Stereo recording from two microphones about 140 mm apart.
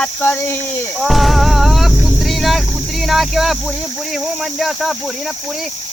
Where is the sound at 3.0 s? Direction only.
Centre (ahead or behind).